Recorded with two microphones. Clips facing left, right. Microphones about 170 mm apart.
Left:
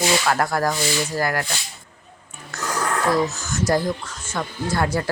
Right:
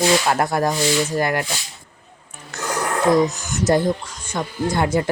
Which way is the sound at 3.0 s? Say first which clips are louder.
Right 6 dB; 15° right (ahead or behind).